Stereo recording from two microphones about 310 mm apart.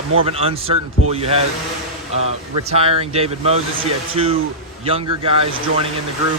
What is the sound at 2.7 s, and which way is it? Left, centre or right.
A man's voice, centre.